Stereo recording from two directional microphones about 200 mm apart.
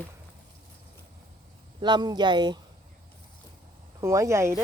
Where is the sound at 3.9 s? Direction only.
15° right (ahead or behind).